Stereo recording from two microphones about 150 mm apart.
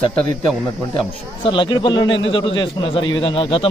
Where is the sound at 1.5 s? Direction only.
30° left (ahead or behind).